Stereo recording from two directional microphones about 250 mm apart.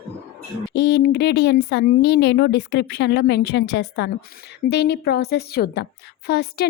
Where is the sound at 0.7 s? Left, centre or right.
Left.